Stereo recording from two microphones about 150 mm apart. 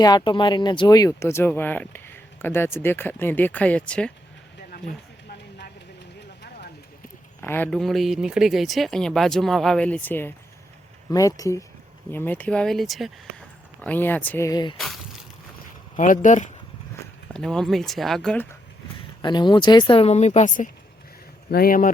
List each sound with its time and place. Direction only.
0.0 s speech: 30° left (ahead or behind); by 4.1 s 5° left (ahead or behind)
4.7 s a sound: 85° left
7.4 s speech: 15° left (ahead or behind)
7.7 s speech: centre (ahead or behind)
11.1 s speech: 25° left (ahead or behind); by 13.1 s centre (ahead or behind)
13.8 s speech: 10° left (ahead or behind); by 14.8 s 30° left (ahead or behind)
14.8 s a sound: centre (ahead or behind)
16.0 s speech: 55° left (ahead or behind)
17.3 s speech: 5° left (ahead or behind)
19.2 s speech: 30° left (ahead or behind); by 20.7 s 60° left (ahead or behind)
21.5 s speech: 80° left